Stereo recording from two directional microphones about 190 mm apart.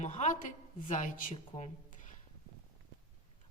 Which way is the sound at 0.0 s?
40° left (ahead or behind).